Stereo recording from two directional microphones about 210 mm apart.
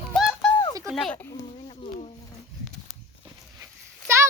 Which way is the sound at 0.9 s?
Centre (ahead or behind).